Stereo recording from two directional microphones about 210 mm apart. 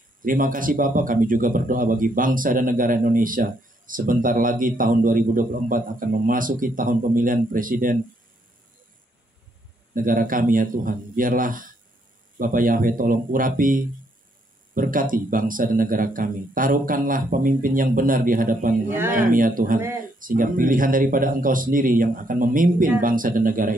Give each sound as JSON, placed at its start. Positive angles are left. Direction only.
{"t": 0.2, "sound": "speech", "side_deg": -40}
{"t": 9.9, "sound": "speech", "side_deg": -40}
{"t": 18.9, "sound": "speech", "side_deg": -10}
{"t": 19.1, "sound": "speech", "side_deg": -40}